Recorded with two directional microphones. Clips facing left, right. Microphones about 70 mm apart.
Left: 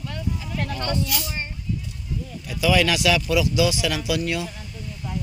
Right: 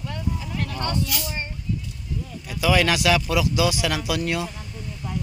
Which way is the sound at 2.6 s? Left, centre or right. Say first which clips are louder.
Even; right.